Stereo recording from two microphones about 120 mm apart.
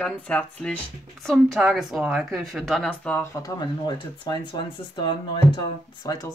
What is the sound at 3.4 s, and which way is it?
Speech, 35° left (ahead or behind).